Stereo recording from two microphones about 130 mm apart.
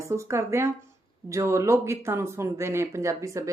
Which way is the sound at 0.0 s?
20° right (ahead or behind).